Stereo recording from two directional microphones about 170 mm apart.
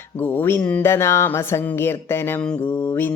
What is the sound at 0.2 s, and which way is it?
Speech, 10° left (ahead or behind).